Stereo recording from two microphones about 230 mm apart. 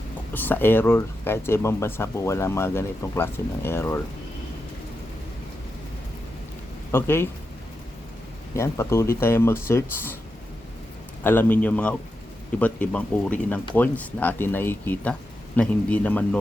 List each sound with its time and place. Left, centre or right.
0.3 s speech: centre
6.9 s speech: centre
8.5 s speech: centre
11.2 s speech: centre